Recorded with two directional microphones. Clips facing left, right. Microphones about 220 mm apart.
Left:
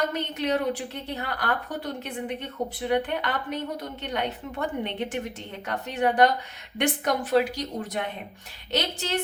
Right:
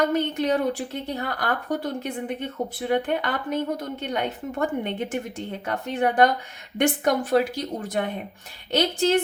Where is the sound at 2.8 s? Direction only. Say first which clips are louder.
Right 2 dB; 45° right (ahead or behind).